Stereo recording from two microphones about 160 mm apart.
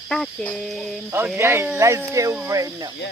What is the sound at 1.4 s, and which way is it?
Speech, 15° right (ahead or behind).